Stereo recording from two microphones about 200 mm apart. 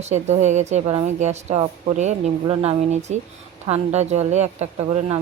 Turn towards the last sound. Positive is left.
turn(degrees=-30)  # may be behind; listen again after turning